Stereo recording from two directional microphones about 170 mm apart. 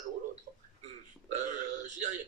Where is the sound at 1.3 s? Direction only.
45° right (ahead or behind).